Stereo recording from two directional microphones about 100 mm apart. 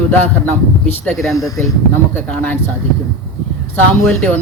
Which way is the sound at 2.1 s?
15° left (ahead or behind).